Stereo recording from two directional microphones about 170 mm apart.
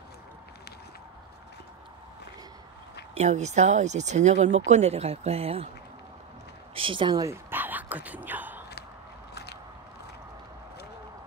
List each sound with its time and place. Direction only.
3.2 s speech: 45° right (ahead or behind)
6.7 s speech: 30° right (ahead or behind)
7.5 s whispering: 10° right (ahead or behind)
9.3 s biting: 75° left (ahead or behind)